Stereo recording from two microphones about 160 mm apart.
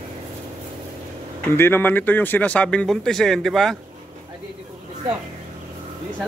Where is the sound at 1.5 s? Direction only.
15° left (ahead or behind).